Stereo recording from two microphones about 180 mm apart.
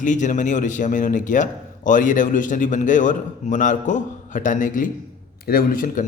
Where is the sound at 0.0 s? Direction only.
45° left (ahead or behind).